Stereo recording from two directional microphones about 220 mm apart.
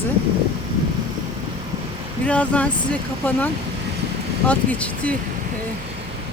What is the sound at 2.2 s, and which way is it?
Speech, 5° left (ahead or behind).